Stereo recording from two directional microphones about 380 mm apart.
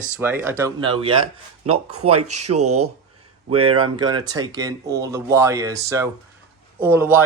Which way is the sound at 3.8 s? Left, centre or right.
Centre.